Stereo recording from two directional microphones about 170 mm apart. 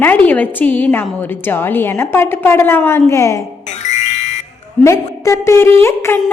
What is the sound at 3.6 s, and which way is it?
Music, 40° left (ahead or behind).